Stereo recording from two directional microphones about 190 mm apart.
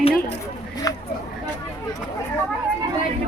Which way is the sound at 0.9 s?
20° left (ahead or behind).